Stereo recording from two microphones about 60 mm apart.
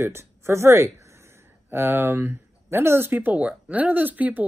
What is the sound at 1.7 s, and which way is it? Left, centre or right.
Speech, right.